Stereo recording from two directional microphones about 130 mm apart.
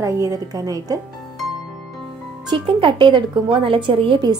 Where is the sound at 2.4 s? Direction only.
40° right (ahead or behind).